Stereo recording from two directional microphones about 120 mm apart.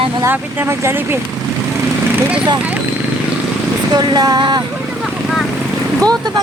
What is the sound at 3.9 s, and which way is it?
Speech, 35° right (ahead or behind).